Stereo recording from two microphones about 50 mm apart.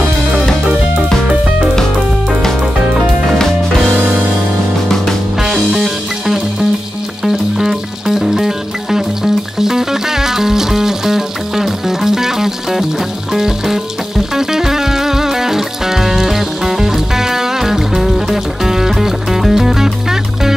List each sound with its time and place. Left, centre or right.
0.7 s music: centre
3.3 s music: centre
3.9 s music: right
4.8 s music: centre
5.4 s music: centre